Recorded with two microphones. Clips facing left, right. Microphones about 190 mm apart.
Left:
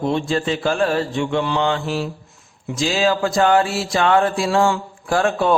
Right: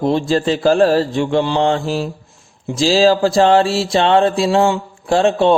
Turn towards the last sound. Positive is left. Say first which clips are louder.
# right 5 dB
turn(degrees=-25)  # may be behind; listen again after turning